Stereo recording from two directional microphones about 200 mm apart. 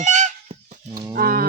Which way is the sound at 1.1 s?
45° right (ahead or behind).